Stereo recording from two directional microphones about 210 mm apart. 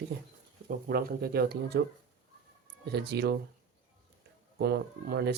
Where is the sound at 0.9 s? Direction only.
45° right (ahead or behind).